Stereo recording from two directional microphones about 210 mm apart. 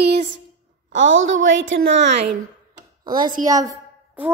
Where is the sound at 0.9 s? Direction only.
65° right (ahead or behind).